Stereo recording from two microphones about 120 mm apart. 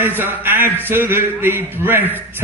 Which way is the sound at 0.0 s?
15° right (ahead or behind).